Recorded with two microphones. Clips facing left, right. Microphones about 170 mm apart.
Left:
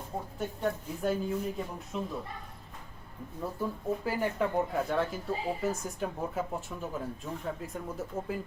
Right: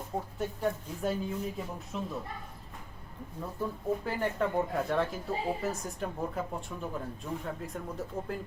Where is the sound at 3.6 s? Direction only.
5° left (ahead or behind).